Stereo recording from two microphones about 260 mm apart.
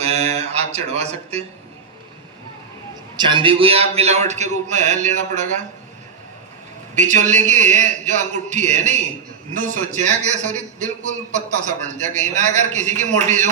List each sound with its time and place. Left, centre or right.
0.0 s music: right
3.2 s a man's voice: centre
6.9 s a man's voice: right